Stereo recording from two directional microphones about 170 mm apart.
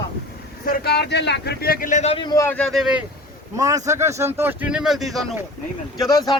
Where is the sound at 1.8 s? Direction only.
45° left (ahead or behind).